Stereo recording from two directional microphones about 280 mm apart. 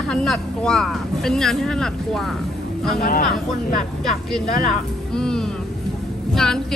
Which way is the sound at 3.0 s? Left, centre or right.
Left.